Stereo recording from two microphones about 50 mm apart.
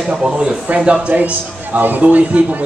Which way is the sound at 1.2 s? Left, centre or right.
Right.